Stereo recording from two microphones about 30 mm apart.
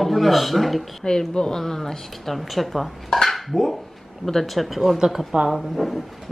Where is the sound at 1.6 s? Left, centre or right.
Centre.